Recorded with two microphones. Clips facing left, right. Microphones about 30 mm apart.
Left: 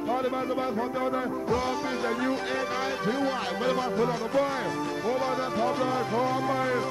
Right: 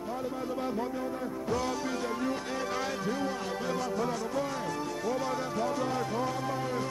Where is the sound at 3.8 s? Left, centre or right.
Left.